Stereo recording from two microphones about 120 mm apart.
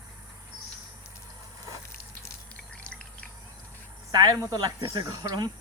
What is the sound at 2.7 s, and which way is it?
Drip, 10° left (ahead or behind).